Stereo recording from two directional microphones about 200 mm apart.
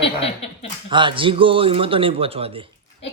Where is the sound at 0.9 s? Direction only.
25° right (ahead or behind).